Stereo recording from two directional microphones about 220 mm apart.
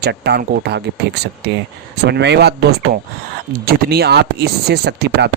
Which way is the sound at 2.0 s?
50° right (ahead or behind).